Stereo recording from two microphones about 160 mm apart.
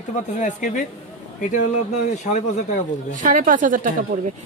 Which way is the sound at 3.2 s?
55° right (ahead or behind).